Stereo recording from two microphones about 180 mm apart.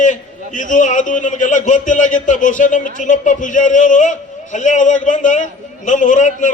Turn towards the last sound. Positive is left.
turn(degrees=45)  # may be behind; listen again after turning